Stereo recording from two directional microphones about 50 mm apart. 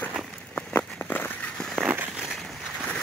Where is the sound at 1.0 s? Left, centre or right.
Left.